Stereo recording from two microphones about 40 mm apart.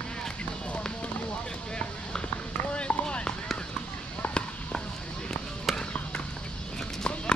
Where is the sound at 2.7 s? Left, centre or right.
Left.